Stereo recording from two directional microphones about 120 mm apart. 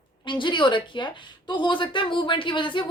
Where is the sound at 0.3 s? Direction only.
40° left (ahead or behind).